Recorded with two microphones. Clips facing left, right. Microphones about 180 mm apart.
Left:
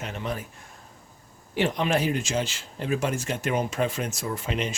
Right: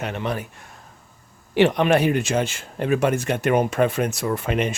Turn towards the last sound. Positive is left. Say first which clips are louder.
# right 6 dB
turn(degrees=-55)  # may be behind; listen again after turning